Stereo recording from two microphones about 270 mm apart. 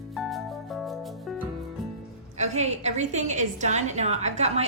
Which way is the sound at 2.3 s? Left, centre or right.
Right.